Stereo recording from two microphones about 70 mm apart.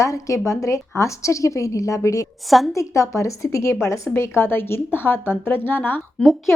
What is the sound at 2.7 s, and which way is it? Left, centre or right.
A woman's voice, left.